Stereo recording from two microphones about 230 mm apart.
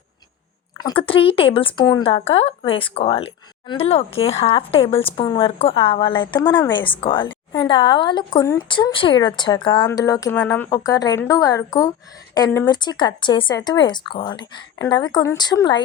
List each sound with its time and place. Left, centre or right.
0.8 s a woman's voice: centre